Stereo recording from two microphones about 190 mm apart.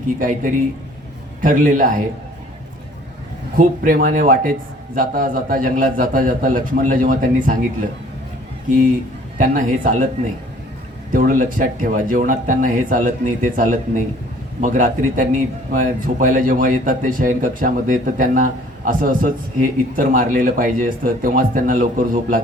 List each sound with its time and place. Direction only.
0.2 s a man's voice: 45° right (ahead or behind)
3.6 s a man's voice: 45° right (ahead or behind)
9.4 s a man's voice: 45° right (ahead or behind)
11.1 s a man's voice: 45° right (ahead or behind)